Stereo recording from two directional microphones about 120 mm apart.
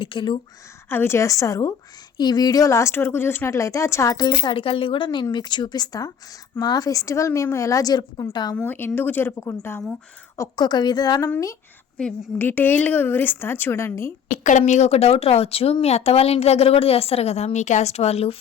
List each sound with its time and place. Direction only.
0.0 s speech: 45° left (ahead or behind)
0.9 s a woman's voice: 20° left (ahead or behind)
8.5 s a woman's voice: 15° left (ahead or behind)
10.3 s a woman's voice: 30° left (ahead or behind)
11.2 s speech: 25° left (ahead or behind)
11.9 s a woman's voice: 5° left (ahead or behind); by 14.1 s 20° left (ahead or behind)
14.3 s speech: 90° left; by 18.3 s 60° left (ahead or behind)